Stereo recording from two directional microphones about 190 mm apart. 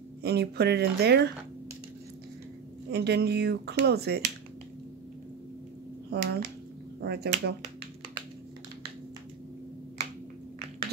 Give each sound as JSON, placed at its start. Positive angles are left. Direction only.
{"t": 0.2, "sound": "speech", "side_deg": -60}
{"t": 2.9, "sound": "speech", "side_deg": -60}
{"t": 6.0, "sound": "speech", "side_deg": -55}